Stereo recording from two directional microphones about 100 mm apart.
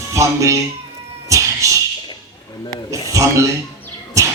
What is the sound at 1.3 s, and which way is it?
Cat, 35° right (ahead or behind).